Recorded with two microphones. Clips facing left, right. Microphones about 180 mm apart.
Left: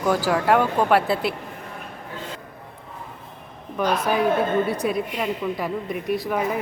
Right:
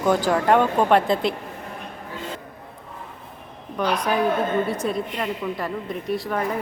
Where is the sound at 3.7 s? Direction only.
5° left (ahead or behind).